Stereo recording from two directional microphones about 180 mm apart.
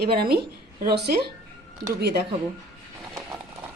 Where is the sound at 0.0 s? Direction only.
60° right (ahead or behind).